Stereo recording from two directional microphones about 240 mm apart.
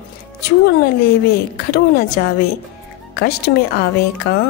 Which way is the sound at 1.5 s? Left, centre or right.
Left.